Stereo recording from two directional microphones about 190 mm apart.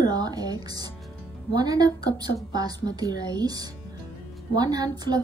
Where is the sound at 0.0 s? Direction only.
20° right (ahead or behind).